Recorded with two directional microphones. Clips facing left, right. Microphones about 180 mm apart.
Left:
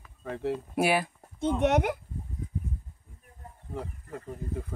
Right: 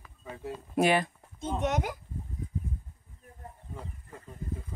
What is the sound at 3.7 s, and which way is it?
Speech, 65° left (ahead or behind).